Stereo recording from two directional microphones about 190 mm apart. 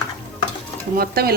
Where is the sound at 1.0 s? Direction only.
55° right (ahead or behind).